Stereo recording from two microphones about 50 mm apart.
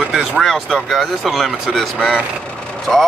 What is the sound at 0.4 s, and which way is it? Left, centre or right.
Speech, centre.